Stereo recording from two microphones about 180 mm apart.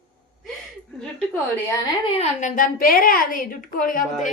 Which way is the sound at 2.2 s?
45° left (ahead or behind).